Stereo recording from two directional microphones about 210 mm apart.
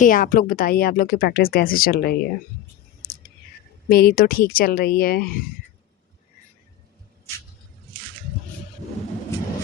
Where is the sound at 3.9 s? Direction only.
45° left (ahead or behind).